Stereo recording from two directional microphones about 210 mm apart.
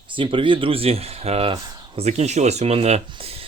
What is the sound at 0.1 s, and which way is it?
Speech, 25° right (ahead or behind).